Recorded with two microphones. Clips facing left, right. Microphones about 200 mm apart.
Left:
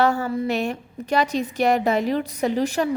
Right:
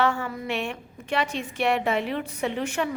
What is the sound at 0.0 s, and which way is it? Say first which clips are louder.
A woman's voice: left 5 dB; 40° left (ahead or behind).